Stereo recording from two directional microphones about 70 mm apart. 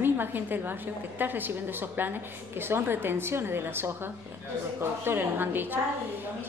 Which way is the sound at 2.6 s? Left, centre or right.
Right.